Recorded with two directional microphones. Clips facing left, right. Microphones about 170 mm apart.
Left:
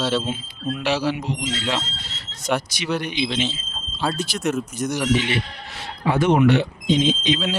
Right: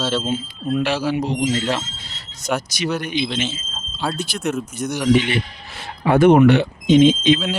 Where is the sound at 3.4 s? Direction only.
Centre (ahead or behind).